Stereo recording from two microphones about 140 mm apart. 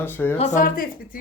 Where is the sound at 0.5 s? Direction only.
85° left.